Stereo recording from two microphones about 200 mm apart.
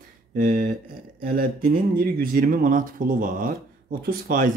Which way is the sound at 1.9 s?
45° right (ahead or behind).